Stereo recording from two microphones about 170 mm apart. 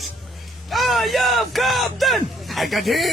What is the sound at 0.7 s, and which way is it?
Speech, centre (ahead or behind).